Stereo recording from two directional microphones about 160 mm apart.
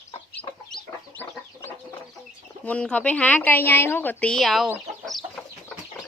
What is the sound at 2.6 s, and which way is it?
A woman's voice, 10° left (ahead or behind).